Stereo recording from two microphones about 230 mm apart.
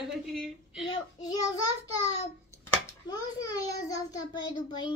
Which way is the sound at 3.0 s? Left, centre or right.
Centre.